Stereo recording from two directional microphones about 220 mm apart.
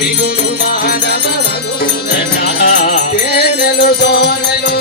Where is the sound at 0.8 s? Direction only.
45° left (ahead or behind).